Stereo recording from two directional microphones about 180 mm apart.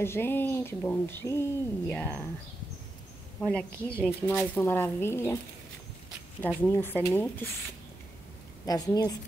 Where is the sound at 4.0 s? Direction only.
10° left (ahead or behind).